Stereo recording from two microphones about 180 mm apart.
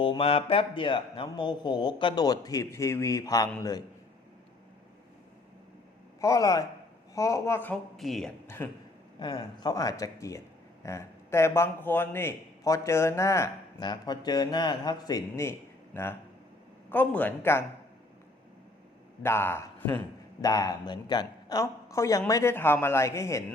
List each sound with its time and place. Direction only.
0.0 s speech: 30° left (ahead or behind)
6.1 s a man's voice: 20° left (ahead or behind); by 8.3 s centre (ahead or behind)
8.4 s a man's voice: 10° left (ahead or behind)
9.1 s a man's voice: 25° left (ahead or behind)
16.9 s a man's voice: 10° left (ahead or behind)
19.2 s a man's voice: 15° left (ahead or behind)